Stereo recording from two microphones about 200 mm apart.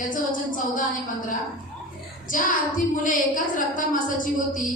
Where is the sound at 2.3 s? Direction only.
40° left (ahead or behind).